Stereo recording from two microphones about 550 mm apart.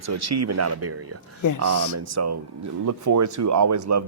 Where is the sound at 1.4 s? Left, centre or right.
Left.